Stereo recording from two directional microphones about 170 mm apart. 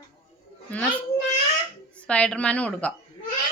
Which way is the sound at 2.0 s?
5° left (ahead or behind).